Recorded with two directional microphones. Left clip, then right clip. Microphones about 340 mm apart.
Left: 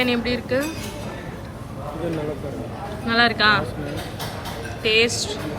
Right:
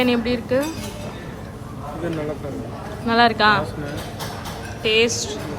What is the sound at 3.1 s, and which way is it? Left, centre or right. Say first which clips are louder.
Speech: right 2 dB; centre.